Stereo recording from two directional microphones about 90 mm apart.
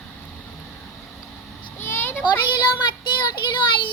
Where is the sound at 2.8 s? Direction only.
55° left (ahead or behind).